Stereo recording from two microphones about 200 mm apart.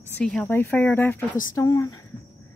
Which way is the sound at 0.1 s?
5° left (ahead or behind).